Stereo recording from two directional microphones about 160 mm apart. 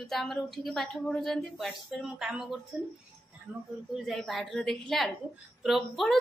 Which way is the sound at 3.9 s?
Centre (ahead or behind).